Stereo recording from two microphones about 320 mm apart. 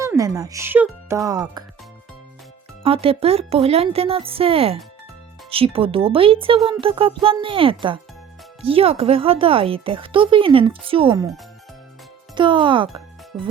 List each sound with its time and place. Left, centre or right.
0.0 s speech: centre
2.8 s speech: centre
12.3 s speech: centre